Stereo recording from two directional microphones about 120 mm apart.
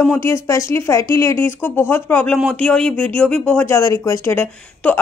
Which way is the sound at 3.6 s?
20° left (ahead or behind).